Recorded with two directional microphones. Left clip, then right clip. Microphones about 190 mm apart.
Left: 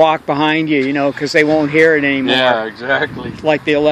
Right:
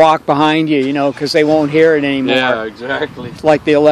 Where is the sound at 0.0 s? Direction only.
25° right (ahead or behind).